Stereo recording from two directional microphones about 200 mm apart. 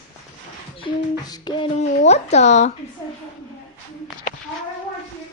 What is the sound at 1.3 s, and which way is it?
Beatboxing, 25° left (ahead or behind).